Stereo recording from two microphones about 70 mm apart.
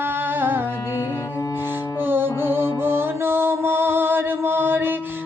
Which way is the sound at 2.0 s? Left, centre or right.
Right.